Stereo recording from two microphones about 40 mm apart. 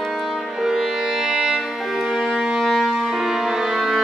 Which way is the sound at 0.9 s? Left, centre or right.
Centre.